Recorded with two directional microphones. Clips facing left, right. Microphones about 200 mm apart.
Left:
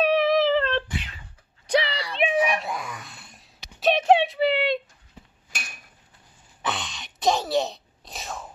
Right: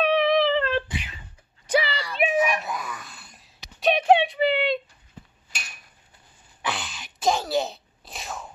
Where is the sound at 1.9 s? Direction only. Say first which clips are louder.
Even; 35° left (ahead or behind).